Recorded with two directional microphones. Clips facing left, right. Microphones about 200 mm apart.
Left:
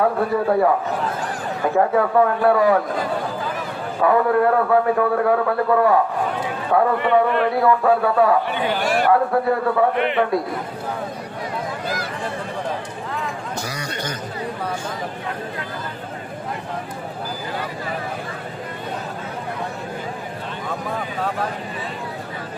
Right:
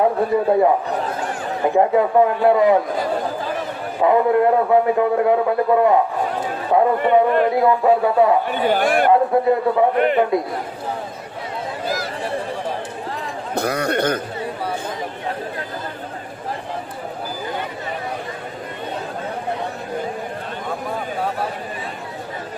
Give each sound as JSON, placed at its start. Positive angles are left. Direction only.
{"t": 0.0, "sound": "a man's voice", "side_deg": -20}
{"t": 4.0, "sound": "a man's voice", "side_deg": -20}
{"t": 7.3, "sound": "a man's voice", "side_deg": -40}
{"t": 7.5, "sound": "a man's voice", "side_deg": -20}
{"t": 8.6, "sound": "a man's voice", "side_deg": -50}
{"t": 9.0, "sound": "a man's voice", "side_deg": -20}
{"t": 13.5, "sound": "a man's voice", "side_deg": -55}